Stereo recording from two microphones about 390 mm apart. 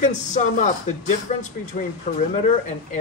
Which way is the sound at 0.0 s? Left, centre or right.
Centre.